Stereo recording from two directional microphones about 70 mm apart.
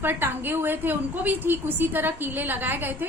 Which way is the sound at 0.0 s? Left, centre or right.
Right.